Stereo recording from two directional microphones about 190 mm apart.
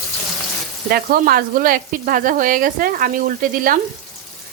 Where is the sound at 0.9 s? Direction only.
50° right (ahead or behind).